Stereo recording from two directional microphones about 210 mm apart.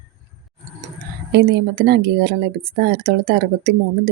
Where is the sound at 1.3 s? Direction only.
50° right (ahead or behind).